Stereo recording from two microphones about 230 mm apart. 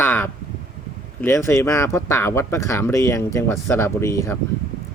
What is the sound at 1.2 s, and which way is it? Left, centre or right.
Speech, centre.